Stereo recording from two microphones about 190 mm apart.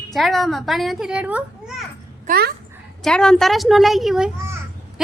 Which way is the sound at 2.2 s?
50° right (ahead or behind).